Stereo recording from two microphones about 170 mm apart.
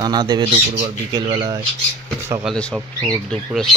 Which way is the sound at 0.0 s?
25° right (ahead or behind).